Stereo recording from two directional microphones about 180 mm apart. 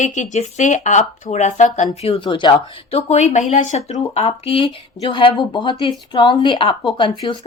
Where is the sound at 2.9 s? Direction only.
40° left (ahead or behind).